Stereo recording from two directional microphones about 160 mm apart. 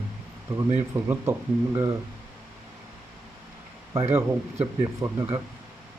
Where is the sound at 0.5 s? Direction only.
15° right (ahead or behind).